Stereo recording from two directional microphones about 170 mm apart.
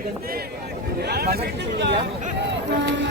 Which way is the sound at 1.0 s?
70° right (ahead or behind).